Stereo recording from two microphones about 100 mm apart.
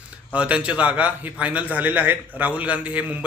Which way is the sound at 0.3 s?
10° right (ahead or behind).